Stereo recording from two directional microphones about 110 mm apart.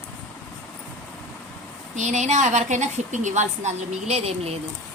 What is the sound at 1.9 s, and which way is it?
A woman's voice, 90° right.